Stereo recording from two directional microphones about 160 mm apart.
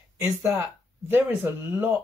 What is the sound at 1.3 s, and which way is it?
Speech, 10° right (ahead or behind).